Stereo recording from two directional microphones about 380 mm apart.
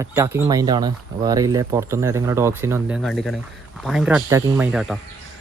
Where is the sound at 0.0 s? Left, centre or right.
Centre.